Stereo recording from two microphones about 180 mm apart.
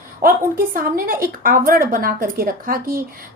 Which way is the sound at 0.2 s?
50° right (ahead or behind).